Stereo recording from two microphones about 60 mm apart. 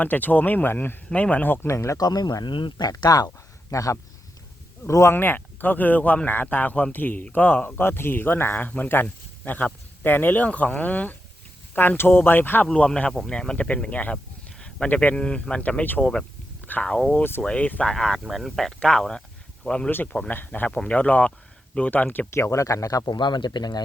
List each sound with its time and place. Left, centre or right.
0.0 s speech: left
1.1 s speech: left
2.0 s speech: left
5.1 s speech: left
7.8 s speech: left
12.7 s speech: centre
16.8 s speech: centre
20.2 s speech: left
22.3 s speech: left